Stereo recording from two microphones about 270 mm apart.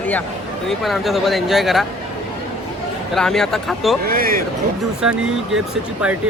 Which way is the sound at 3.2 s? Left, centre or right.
Centre.